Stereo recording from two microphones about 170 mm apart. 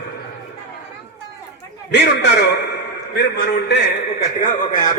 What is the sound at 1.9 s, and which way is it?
A man's voice, 85° left.